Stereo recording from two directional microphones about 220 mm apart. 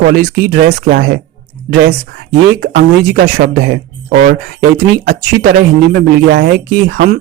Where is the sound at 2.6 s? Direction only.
40° right (ahead or behind).